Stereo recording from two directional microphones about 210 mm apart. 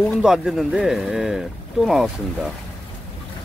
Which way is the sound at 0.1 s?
5° right (ahead or behind).